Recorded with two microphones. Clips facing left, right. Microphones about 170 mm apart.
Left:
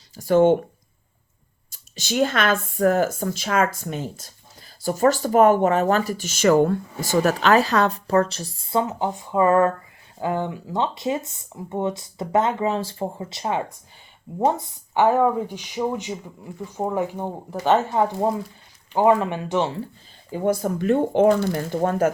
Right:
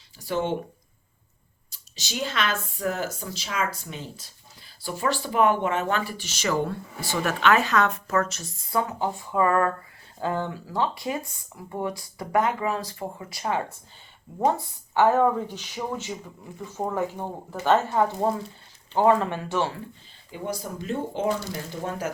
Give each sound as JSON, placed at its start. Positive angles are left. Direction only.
{"t": 0.2, "sound": "a woman's voice", "side_deg": 50}
{"t": 1.7, "sound": "a woman's voice", "side_deg": 50}
{"t": 20.3, "sound": "speech", "side_deg": 50}